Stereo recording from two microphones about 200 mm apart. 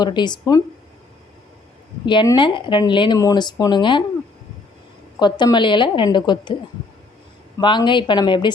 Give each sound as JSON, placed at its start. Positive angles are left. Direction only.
{"t": 0.0, "sound": "speech", "side_deg": 20}
{"t": 2.0, "sound": "speech", "side_deg": 25}
{"t": 5.2, "sound": "speech", "side_deg": 20}
{"t": 7.6, "sound": "speech", "side_deg": 25}